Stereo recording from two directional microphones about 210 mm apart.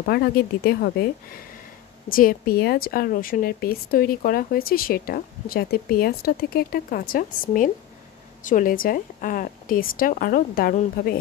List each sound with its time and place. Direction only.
0.0 s a woman's voice: 50° left (ahead or behind)